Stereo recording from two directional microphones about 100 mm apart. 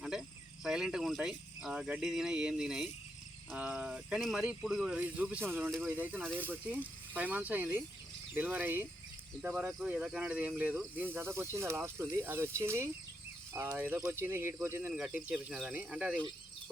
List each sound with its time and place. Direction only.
0.0 s speech: 5° right (ahead or behind); by 12.9 s 30° right (ahead or behind)
13.7 s speech: 15° right (ahead or behind)